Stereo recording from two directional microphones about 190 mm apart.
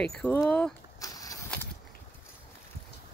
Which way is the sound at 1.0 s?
20° left (ahead or behind).